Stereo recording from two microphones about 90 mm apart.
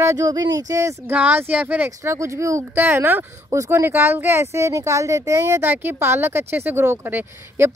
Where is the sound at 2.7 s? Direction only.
25° right (ahead or behind).